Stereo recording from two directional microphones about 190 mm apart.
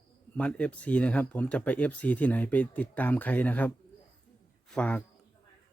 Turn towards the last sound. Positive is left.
turn(degrees=5)  # may be behind; listen again after turning